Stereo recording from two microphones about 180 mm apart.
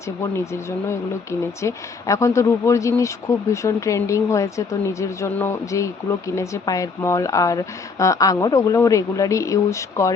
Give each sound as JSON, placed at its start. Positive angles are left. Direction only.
{"t": 0.2, "sound": "speech", "side_deg": 15}